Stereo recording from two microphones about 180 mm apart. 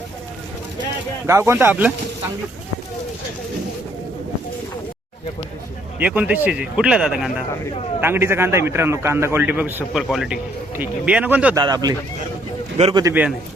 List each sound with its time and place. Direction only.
1.3 s a man's voice: 15° right (ahead or behind)
6.0 s a man's voice: 10° right (ahead or behind)
8.0 s a man's voice: 15° right (ahead or behind)
11.5 s speech: 20° right (ahead or behind)
12.7 s speech: 35° right (ahead or behind)
13.0 s a man's voice: 15° right (ahead or behind)